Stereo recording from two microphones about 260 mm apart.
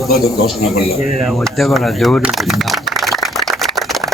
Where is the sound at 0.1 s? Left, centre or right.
Left.